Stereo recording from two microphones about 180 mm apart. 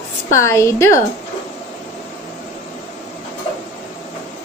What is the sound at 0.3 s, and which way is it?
Speech, 15° left (ahead or behind).